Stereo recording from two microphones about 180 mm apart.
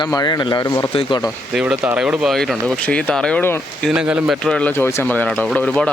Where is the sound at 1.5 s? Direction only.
5° right (ahead or behind); by 3.6 s 10° left (ahead or behind).